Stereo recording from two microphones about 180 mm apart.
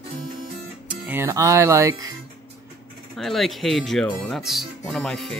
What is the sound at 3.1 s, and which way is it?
Speech, centre (ahead or behind).